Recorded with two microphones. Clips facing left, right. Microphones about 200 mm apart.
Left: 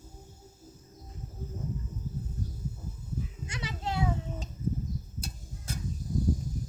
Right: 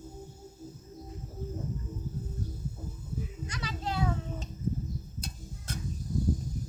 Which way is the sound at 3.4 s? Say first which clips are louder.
Even; 25° left (ahead or behind).